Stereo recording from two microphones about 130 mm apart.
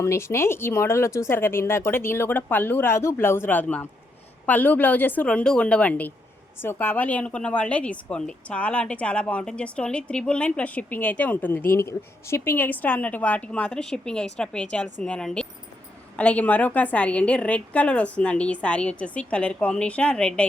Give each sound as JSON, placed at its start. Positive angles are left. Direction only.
{"t": 0.0, "sound": "a woman's voice", "side_deg": 20}